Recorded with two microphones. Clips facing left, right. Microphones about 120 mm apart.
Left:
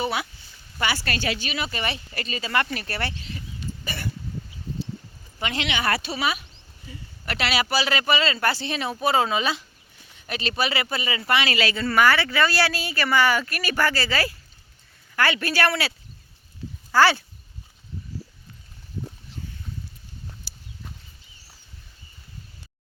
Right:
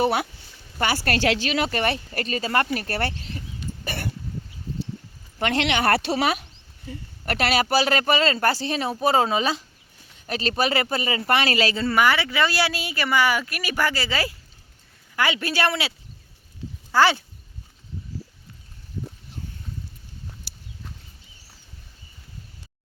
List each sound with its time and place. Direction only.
0.0 s speech: 55° right (ahead or behind)
3.8 s a sound: 55° right (ahead or behind)
5.4 s speech: 60° right (ahead or behind); by 15.9 s 20° right (ahead or behind)
16.9 s speech: 20° right (ahead or behind)
20.5 s horse: 65° right (ahead or behind)